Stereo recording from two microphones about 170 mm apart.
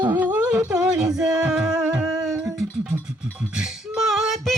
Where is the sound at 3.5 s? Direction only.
5° right (ahead or behind).